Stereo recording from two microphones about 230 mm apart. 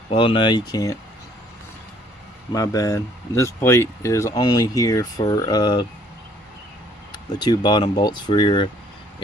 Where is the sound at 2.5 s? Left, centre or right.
Centre.